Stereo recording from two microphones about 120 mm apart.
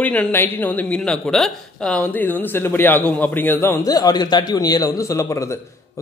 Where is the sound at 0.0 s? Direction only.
15° left (ahead or behind).